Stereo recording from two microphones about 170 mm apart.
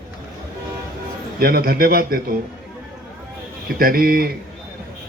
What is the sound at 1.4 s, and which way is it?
Speech, 60° right (ahead or behind).